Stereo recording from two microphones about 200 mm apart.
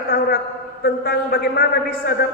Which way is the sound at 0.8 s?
50° left (ahead or behind).